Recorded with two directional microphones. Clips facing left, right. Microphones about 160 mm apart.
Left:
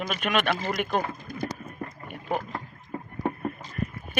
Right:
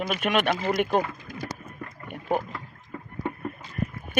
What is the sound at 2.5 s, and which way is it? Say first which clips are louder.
Rowboat: left 3 dB; 35° left (ahead or behind).